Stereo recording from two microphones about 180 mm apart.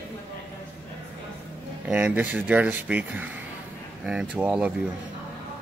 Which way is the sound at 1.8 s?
10° right (ahead or behind).